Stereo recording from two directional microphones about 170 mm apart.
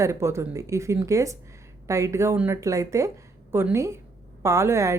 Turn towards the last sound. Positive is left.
turn(degrees=-15)  # may be behind; listen again after turning